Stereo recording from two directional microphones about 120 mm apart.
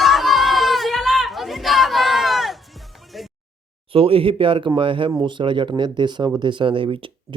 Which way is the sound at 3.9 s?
50° right (ahead or behind).